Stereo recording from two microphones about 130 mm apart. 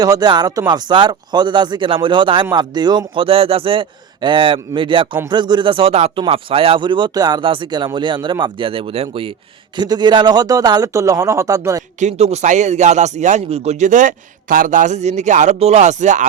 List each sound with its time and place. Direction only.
0.0 s speech: 30° right (ahead or behind)
9.7 s a man's voice: 35° right (ahead or behind)
11.9 s speech: 60° right (ahead or behind)